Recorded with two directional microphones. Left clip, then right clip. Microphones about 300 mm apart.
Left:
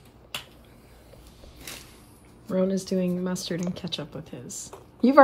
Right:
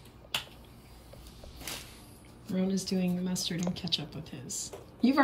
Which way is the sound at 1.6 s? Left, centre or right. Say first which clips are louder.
Even; centre.